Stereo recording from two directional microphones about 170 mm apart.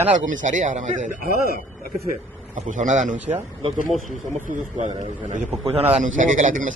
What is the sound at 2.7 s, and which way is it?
Speech, 45° right (ahead or behind).